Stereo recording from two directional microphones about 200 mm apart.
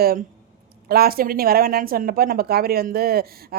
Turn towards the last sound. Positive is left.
turn(degrees=-50)  # may be behind; listen again after turning